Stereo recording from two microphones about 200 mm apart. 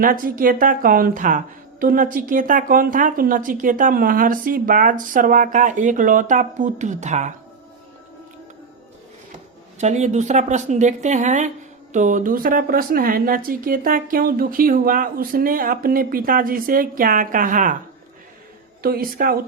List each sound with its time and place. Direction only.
0.0 s a woman's voice: 45° right (ahead or behind)
9.7 s a woman's voice: 35° right (ahead or behind)
18.8 s speech: 50° right (ahead or behind)